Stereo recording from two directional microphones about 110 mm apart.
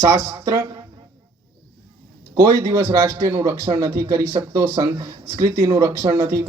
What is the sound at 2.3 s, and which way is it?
A man's voice, 30° right (ahead or behind).